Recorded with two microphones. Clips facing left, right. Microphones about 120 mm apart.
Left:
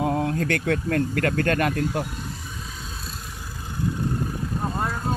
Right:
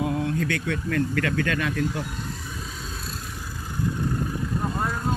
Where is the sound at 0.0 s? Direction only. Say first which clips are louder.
Left 2 dB; 40° left (ahead or behind).